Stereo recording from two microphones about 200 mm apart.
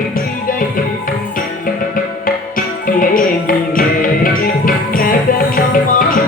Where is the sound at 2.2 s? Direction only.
45° left (ahead or behind).